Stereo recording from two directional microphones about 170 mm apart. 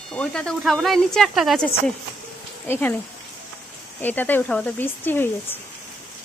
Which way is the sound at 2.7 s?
10° left (ahead or behind).